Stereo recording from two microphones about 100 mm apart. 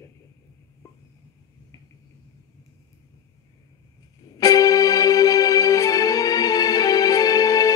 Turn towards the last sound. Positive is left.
turn(degrees=40)  # may be behind; listen again after turning